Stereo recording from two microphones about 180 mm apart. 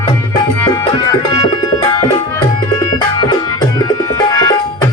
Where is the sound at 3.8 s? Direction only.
20° left (ahead or behind).